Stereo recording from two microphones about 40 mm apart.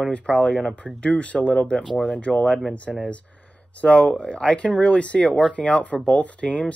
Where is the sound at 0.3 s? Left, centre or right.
Left.